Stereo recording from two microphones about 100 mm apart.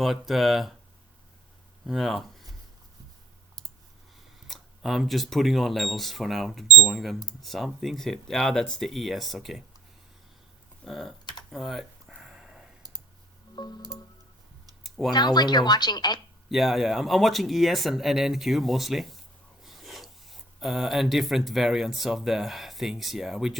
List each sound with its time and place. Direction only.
0.0 s speech: centre (ahead or behind)
1.9 s speech: centre (ahead or behind)
4.4 s speech: centre (ahead or behind)
10.8 s speech: centre (ahead or behind)
11.5 s a sound: centre (ahead or behind)
13.6 s speech: 45° left (ahead or behind)
14.8 s computer keyboard: centre (ahead or behind)
15.1 s speech: 45° left (ahead or behind)
16.5 s speech: centre (ahead or behind)